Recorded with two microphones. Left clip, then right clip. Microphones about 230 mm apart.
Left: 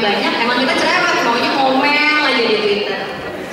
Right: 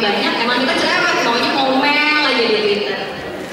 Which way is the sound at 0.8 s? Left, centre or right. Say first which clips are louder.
Left 1 dB; centre.